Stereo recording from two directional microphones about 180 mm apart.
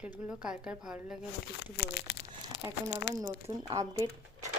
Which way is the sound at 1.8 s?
65° left (ahead or behind).